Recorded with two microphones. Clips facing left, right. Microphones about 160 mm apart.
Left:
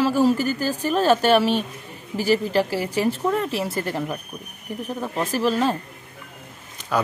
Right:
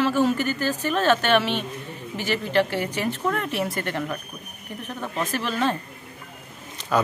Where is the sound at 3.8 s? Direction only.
10° left (ahead or behind).